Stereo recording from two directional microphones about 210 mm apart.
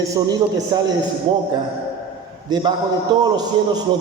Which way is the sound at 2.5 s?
20° right (ahead or behind).